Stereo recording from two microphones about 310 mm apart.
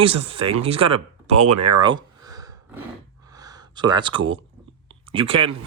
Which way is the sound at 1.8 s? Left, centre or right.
Centre.